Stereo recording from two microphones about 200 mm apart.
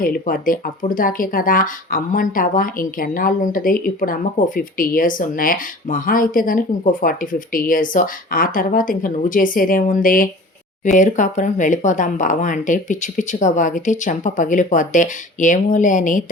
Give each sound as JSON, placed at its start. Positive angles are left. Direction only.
{"t": 0.0, "sound": "speech", "side_deg": 45}